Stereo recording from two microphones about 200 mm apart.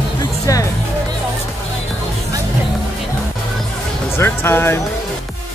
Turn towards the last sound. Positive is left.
turn(degrees=10)  # may be behind; listen again after turning